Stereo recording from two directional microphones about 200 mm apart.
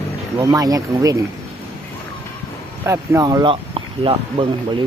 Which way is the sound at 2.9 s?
15° right (ahead or behind).